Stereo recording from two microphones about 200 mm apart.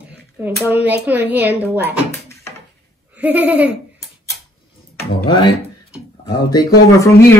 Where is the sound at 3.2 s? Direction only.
10° right (ahead or behind).